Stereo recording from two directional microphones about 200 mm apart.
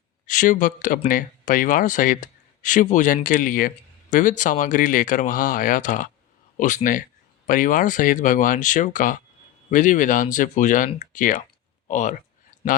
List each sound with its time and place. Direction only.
0.3 s speech: 40° left (ahead or behind)